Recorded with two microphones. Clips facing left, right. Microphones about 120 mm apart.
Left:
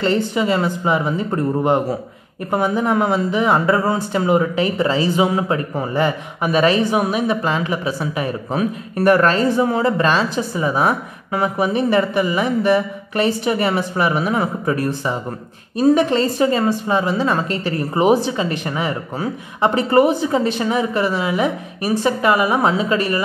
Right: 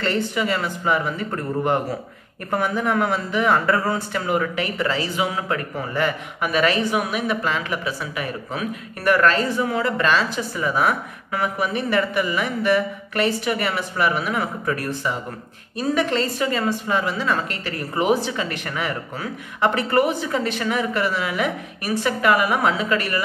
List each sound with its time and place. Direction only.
0.0 s speech: 25° left (ahead or behind)